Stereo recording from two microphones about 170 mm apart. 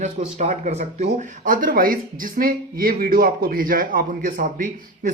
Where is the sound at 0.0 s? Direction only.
45° right (ahead or behind).